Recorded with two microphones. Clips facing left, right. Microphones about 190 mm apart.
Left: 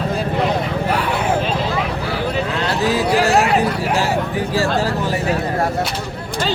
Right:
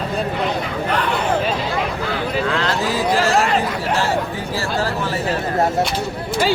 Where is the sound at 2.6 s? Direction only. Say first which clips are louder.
Left 2 dB; 15° left (ahead or behind).